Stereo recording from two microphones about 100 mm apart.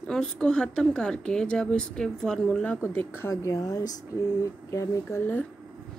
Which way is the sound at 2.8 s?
25° left (ahead or behind).